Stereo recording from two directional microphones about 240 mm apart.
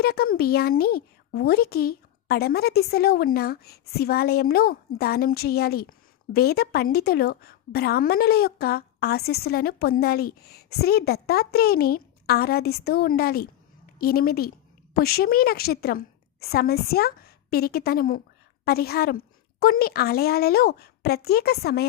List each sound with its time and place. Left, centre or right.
0.0 s a woman's voice: left